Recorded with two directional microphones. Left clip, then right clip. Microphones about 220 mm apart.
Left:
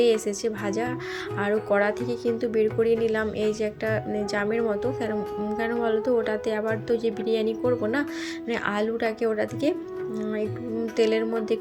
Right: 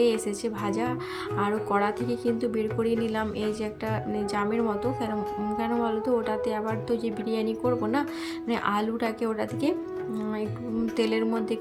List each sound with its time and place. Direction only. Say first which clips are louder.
0.0 s speech: left 3 dB; 5° left (ahead or behind)
10.9 s speech: left 4 dB; centre (ahead or behind)